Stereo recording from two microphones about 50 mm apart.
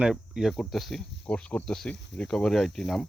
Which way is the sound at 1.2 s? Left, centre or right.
Centre.